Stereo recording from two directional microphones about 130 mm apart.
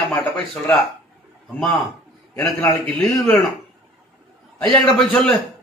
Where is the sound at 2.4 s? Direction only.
5° left (ahead or behind).